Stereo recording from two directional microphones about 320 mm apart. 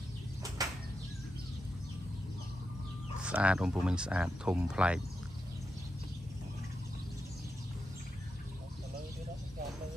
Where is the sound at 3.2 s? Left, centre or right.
Centre.